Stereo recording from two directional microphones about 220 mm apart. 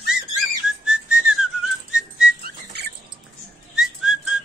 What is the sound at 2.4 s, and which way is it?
Whistling, 50° right (ahead or behind).